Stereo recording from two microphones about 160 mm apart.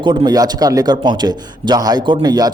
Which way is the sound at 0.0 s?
30° right (ahead or behind).